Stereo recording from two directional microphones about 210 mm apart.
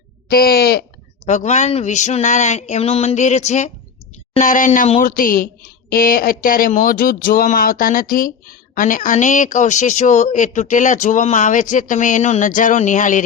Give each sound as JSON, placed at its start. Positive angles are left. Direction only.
{"t": 0.3, "sound": "speech", "side_deg": 45}
{"t": 1.2, "sound": "speech", "side_deg": 35}